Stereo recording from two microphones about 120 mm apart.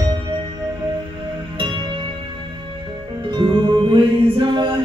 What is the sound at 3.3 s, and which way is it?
Music, 45° right (ahead or behind).